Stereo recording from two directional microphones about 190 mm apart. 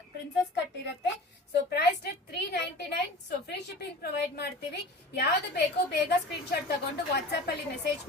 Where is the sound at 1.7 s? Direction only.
60° left (ahead or behind).